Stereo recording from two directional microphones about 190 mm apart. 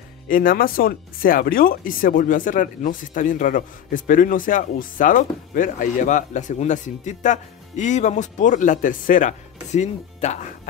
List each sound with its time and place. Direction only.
0.3 s speech: 45° left (ahead or behind)